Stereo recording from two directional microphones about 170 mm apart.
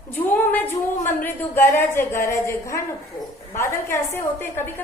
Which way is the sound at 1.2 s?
10° left (ahead or behind).